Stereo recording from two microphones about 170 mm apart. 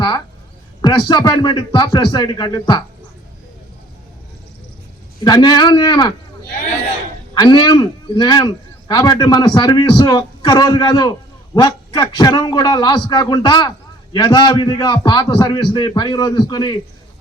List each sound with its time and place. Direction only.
0.8 s a man's voice: 25° left (ahead or behind)
5.2 s a man's voice: 25° left (ahead or behind)
7.3 s a man's voice: 25° left (ahead or behind)